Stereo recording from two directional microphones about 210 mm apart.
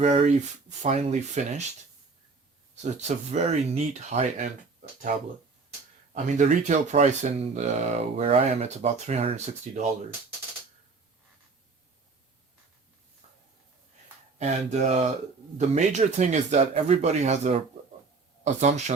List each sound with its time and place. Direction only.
0.0 s speech: 30° right (ahead or behind)
2.8 s speech: 30° right (ahead or behind)
6.2 s speech: 35° right (ahead or behind)
14.3 s speech: 35° right (ahead or behind)